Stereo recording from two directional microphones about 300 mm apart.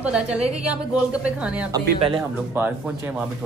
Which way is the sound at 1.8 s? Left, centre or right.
Centre.